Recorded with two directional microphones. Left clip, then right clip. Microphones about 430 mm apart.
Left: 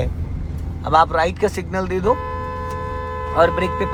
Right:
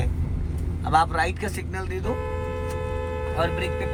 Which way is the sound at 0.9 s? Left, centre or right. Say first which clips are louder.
Left 6 dB; centre.